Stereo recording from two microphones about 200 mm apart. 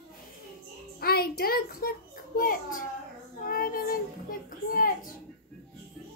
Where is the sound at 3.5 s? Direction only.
45° left (ahead or behind).